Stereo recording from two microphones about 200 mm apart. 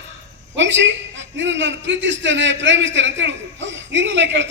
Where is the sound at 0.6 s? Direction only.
65° right (ahead or behind).